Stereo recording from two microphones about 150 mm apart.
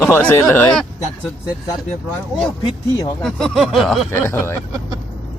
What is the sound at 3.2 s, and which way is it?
Speech, centre (ahead or behind).